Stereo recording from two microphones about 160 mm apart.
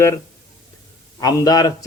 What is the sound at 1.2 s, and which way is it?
Speech, 25° left (ahead or behind).